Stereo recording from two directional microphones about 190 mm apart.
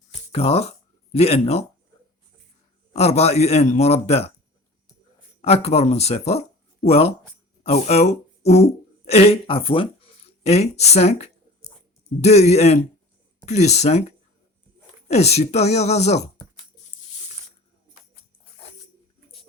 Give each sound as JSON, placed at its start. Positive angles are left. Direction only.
{"t": 0.3, "sound": "a man's voice", "side_deg": 30}
{"t": 2.9, "sound": "a man's voice", "side_deg": 35}
{"t": 5.4, "sound": "a man's voice", "side_deg": 35}
{"t": 15.0, "sound": "a man's voice", "side_deg": 35}